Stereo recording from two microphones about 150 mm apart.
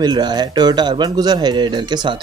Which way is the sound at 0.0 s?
30° right (ahead or behind).